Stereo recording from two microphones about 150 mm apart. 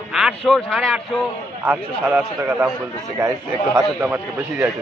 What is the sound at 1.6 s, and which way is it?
A man's voice, 15° right (ahead or behind).